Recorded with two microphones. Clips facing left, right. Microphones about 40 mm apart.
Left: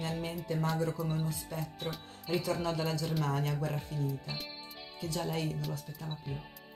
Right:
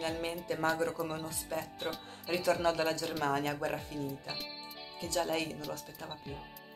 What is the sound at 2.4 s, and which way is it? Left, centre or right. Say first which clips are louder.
Speech: right 7 dB; right.